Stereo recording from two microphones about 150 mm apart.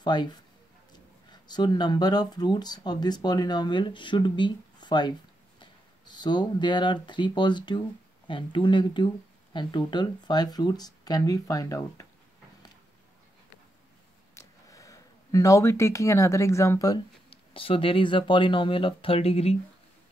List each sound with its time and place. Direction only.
0.0 s speech: 30° left (ahead or behind)
14.3 s speech: 20° left (ahead or behind)
17.3 s speech: 35° left (ahead or behind)